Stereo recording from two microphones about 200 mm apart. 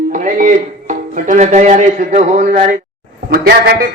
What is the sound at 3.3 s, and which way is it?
Speech, 50° right (ahead or behind).